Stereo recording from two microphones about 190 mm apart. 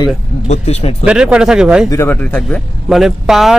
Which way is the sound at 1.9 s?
15° left (ahead or behind).